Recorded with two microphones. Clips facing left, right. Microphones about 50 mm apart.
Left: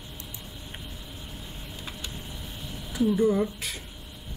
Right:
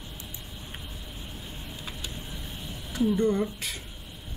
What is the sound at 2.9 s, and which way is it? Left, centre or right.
Speech, centre.